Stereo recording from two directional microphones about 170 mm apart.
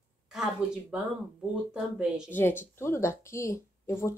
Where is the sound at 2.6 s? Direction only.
15° left (ahead or behind).